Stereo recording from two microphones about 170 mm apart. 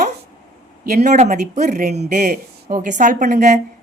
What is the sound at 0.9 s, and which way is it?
A woman's voice, 45° right (ahead or behind).